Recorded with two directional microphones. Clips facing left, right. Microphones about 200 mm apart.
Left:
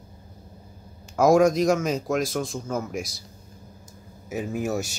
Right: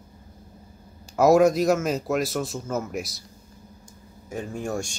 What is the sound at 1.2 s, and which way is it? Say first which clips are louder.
A man's voice: right 1 dB; 5° right (ahead or behind).